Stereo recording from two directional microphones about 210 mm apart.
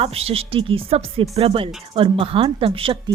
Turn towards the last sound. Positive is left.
turn(degrees=-25)  # may be behind; listen again after turning